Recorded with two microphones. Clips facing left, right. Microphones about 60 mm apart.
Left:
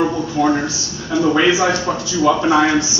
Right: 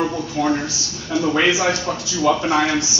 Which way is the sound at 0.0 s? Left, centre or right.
Left.